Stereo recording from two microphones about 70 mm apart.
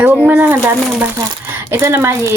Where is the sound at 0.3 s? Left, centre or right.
Right.